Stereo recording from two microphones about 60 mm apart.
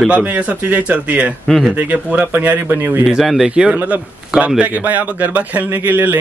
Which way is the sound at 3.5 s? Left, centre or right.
Centre.